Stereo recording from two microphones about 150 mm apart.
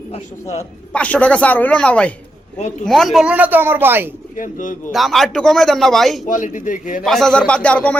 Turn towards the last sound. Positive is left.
turn(degrees=10)  # may be behind; listen again after turning